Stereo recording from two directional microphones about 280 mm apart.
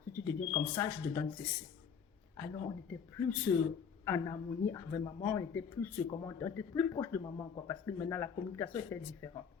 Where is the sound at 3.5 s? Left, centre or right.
Centre.